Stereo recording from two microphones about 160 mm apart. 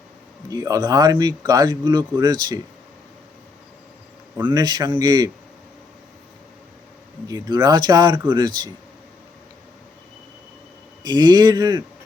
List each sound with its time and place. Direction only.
0.5 s speech: 25° right (ahead or behind)
4.4 s speech: 25° right (ahead or behind)
7.3 s speech: 25° right (ahead or behind)
11.0 s speech: 25° right (ahead or behind)